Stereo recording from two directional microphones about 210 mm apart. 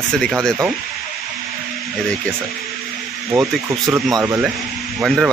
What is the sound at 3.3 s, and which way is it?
Speech, 15° right (ahead or behind).